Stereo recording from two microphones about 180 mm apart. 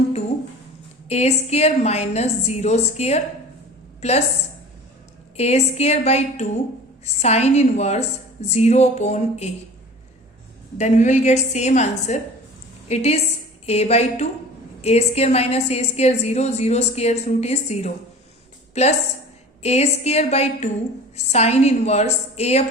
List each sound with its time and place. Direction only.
1.0 s a woman's voice: 35° left (ahead or behind)
5.4 s a woman's voice: 35° left (ahead or behind)
10.8 s a woman's voice: 40° left (ahead or behind)